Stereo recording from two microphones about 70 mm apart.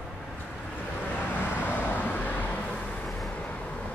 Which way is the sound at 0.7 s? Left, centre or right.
Left.